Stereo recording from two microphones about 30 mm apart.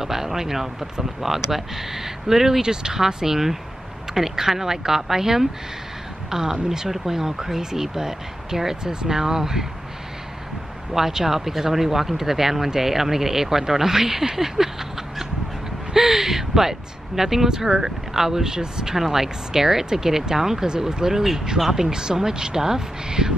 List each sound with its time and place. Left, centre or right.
0.0 s speech: centre
2.6 s speech: right
10.9 s speech: centre
18.9 s speech: centre
20.6 s speech: right